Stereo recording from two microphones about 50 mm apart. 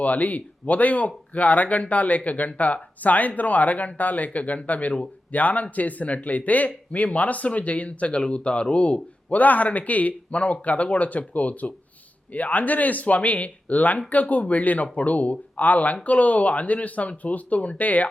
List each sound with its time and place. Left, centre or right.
0.0 s speech: left